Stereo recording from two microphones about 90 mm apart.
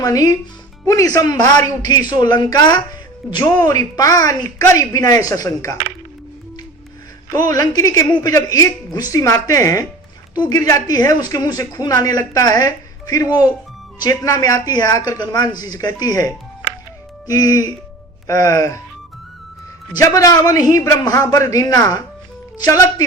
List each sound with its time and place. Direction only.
0.0 s a man's voice: 45° left (ahead or behind)
7.3 s a man's voice: 45° left (ahead or behind)
20.0 s a man's voice: 40° left (ahead or behind)